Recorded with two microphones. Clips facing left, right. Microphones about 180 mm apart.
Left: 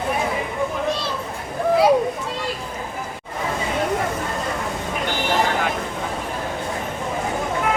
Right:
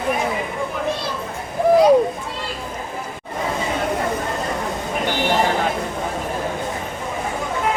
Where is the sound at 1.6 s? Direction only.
15° right (ahead or behind).